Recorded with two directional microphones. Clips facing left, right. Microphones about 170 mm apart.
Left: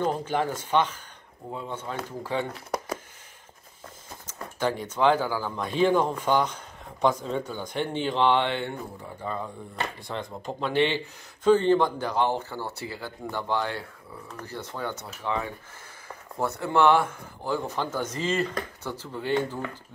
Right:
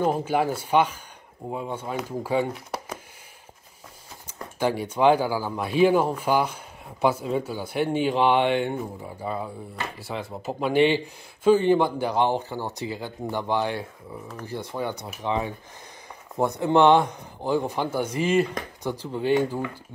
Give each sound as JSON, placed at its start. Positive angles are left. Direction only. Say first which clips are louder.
{"t": 0.0, "sound": "speech", "louder": "right 3 dB", "side_deg": -10}
{"t": 4.6, "sound": "speech", "louder": "right 3 dB", "side_deg": -10}